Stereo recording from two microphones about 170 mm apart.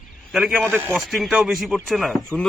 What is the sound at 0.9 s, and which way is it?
A man's voice, centre (ahead or behind).